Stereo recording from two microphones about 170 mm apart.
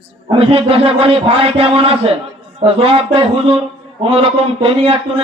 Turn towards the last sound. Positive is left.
turn(degrees=-35)  # may be behind; listen again after turning